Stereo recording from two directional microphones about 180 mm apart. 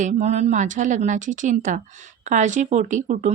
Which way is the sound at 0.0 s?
40° right (ahead or behind).